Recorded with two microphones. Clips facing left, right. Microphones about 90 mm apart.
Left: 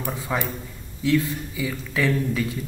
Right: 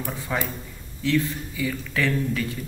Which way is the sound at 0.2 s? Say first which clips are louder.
Left 1 dB; 5° left (ahead or behind).